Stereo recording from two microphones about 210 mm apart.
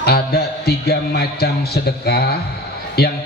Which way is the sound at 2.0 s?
50° left (ahead or behind).